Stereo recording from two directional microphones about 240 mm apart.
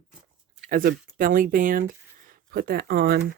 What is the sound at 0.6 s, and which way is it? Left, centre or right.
Speech, right.